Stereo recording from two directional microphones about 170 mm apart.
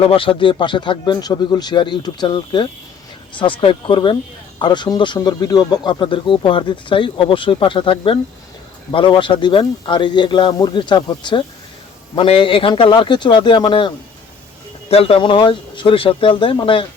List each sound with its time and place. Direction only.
0.0 s speech: 30° left (ahead or behind)